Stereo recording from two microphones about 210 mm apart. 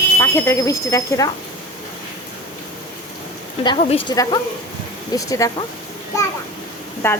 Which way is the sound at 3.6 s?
25° left (ahead or behind).